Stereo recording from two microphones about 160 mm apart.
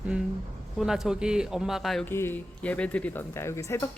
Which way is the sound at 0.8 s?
5° right (ahead or behind).